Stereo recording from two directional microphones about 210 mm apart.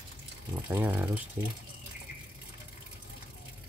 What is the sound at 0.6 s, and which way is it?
Speech, 10° right (ahead or behind).